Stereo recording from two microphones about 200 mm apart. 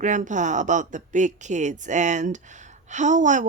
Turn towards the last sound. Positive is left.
turn(degrees=-40)  # may be behind; listen again after turning